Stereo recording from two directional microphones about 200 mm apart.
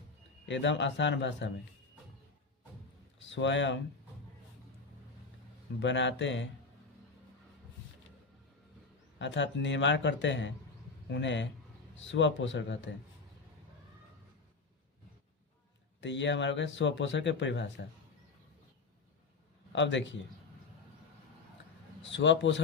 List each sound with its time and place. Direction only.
0.4 s speech: 65° left (ahead or behind)
3.2 s speech: 65° left (ahead or behind)
5.8 s speech: 65° left (ahead or behind)
9.1 s speech: 65° left (ahead or behind)
16.0 s speech: 65° left (ahead or behind)
19.7 s speech: 65° left (ahead or behind)
22.0 s speech: 65° left (ahead or behind)